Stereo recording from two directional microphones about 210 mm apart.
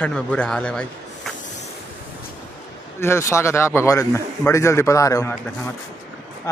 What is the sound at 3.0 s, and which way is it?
A man's voice, 15° left (ahead or behind).